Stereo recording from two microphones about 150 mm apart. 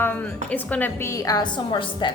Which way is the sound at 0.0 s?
10° left (ahead or behind).